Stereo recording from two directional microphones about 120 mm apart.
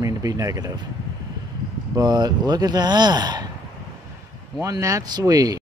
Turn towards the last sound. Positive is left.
turn(degrees=-30)  # may be behind; listen again after turning